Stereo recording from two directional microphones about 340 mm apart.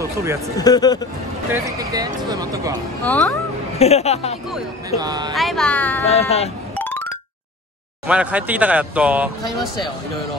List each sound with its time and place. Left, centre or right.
0.0 s a sound: centre
0.6 s speech: centre
1.5 s speech: centre
3.1 s speech: centre
3.7 s speech: centre
4.5 s speech: centre
5.3 s speech: centre
6.0 s speech: centre
6.8 s a sound: centre
8.1 s speech: centre